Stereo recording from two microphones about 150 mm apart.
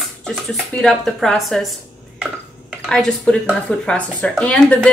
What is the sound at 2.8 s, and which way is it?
A woman's voice, 5° left (ahead or behind).